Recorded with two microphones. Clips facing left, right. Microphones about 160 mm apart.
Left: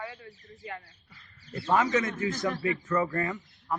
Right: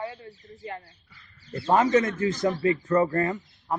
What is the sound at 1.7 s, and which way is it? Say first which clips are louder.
Speech: right 5 dB; 40° right (ahead or behind).